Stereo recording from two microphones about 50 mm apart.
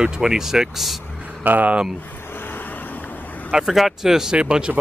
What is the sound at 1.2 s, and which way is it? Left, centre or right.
Vehicle, right.